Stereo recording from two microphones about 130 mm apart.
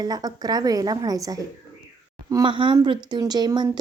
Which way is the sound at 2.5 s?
35° right (ahead or behind).